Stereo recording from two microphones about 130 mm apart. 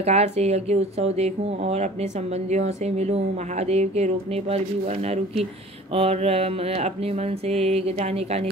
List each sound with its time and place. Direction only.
0.0 s speech: 55° right (ahead or behind)
5.9 s mantra: 50° right (ahead or behind)